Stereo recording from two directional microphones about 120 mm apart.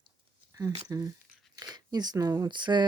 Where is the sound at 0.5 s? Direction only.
30° right (ahead or behind).